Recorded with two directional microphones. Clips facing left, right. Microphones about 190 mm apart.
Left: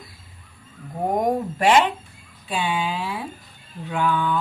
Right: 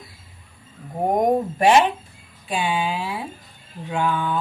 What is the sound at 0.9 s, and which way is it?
Speech, 20° right (ahead or behind).